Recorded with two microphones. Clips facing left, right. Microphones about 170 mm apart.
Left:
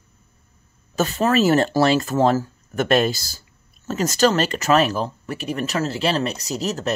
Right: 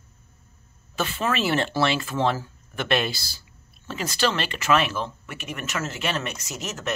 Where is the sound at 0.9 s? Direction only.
40° left (ahead or behind).